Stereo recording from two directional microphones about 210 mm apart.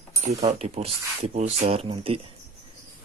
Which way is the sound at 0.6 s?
30° right (ahead or behind).